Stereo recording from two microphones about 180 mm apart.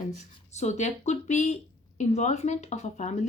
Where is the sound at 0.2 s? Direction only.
40° left (ahead or behind).